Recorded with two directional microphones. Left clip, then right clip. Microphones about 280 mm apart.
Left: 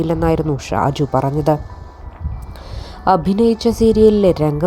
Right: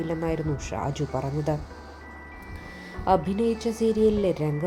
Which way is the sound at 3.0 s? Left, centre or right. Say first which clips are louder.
Left 9 dB; left.